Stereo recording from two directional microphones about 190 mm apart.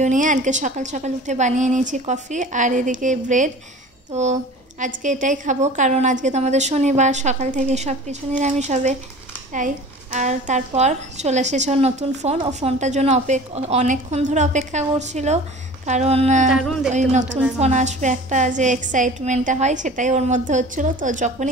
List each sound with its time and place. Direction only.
0.0 s a woman's voice: 40° right (ahead or behind)
10.1 s a woman's voice: 40° right (ahead or behind)
16.4 s music: centre (ahead or behind)
17.1 s a woman's voice: 40° right (ahead or behind)